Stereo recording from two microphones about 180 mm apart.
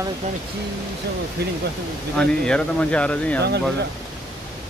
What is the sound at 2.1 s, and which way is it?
Speech, 5° left (ahead or behind).